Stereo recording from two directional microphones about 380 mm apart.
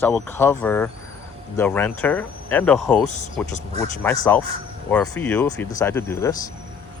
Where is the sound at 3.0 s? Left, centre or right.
Centre.